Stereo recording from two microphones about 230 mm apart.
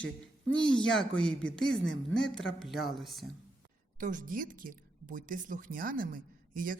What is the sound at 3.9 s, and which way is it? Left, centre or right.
A woman's voice, right.